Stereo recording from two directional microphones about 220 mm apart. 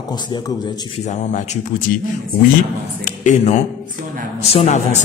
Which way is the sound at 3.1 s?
35° left (ahead or behind).